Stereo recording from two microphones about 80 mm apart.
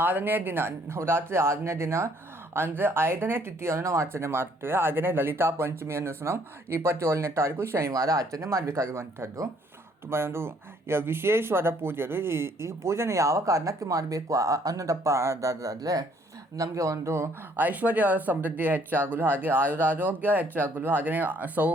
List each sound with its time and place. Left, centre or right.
0.0 s speech: right
17.6 s speech: right